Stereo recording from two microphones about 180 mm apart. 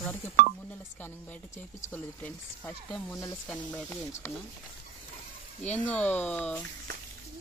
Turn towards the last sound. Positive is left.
turn(degrees=10)  # may be behind; listen again after turning